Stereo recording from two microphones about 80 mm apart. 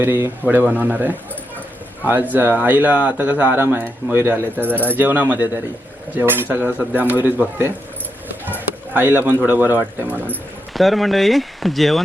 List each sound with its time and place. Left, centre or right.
0.0 s speech: right
10.8 s speech: centre